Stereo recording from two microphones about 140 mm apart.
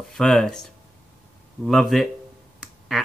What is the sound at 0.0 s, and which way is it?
Speech, 5° left (ahead or behind).